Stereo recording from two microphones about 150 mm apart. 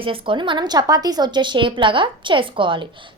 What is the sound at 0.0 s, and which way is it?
A woman's voice, 35° right (ahead or behind).